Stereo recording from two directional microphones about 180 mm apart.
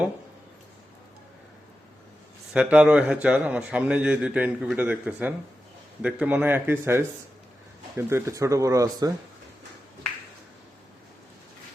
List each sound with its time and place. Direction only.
2.5 s a man's voice: 5° right (ahead or behind)